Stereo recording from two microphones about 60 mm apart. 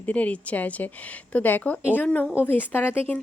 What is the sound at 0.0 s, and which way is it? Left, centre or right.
A woman's voice, left.